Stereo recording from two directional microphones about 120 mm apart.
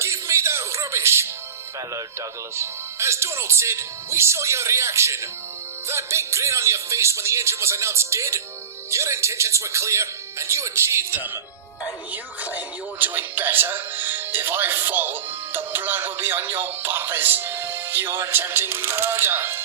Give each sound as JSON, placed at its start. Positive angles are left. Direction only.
{"t": 0.0, "sound": "music", "side_deg": -25}
{"t": 2.6, "sound": "speech", "side_deg": -20}